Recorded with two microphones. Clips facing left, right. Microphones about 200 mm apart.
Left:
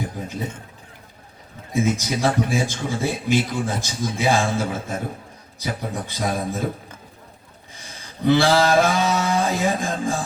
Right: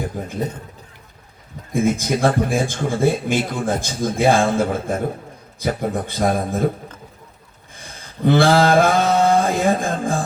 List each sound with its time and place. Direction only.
0.2 s a man's voice: 55° right (ahead or behind)
1.7 s speech: 55° right (ahead or behind)
7.8 s a sound: 55° right (ahead or behind)